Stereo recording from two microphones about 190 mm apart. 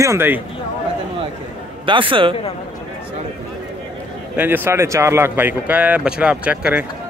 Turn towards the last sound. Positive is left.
turn(degrees=-5)  # may be behind; listen again after turning